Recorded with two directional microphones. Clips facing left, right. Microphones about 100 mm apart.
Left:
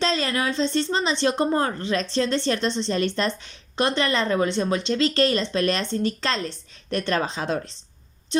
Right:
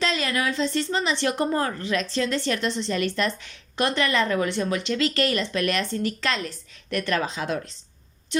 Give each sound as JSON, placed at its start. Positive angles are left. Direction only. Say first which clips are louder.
{"t": 0.0, "sound": "a woman's voice", "louder": "left 1 dB", "side_deg": 30}